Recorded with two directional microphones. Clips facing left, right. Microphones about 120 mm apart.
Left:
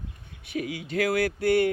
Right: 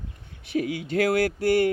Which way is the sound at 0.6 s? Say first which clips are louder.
Right 4 dB; 35° right (ahead or behind).